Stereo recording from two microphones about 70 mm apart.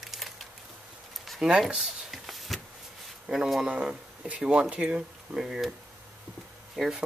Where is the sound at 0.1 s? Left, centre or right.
Centre.